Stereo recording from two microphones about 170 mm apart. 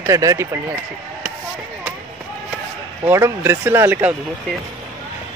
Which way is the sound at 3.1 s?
15° right (ahead or behind).